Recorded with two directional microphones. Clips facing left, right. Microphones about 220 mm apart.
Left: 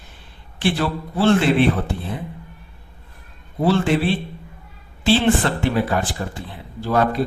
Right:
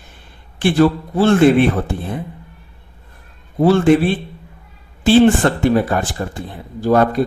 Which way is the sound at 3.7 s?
50° right (ahead or behind).